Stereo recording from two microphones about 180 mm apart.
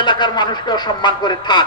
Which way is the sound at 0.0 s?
25° left (ahead or behind).